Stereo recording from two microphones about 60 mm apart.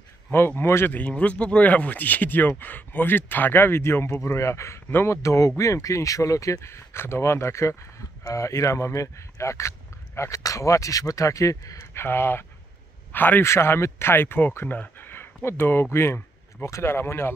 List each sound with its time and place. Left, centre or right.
0.6 s speech: left
0.9 s speech: left
8.2 s speech: left
10.4 s speech: left
11.9 s speech: left
13.4 s speech: left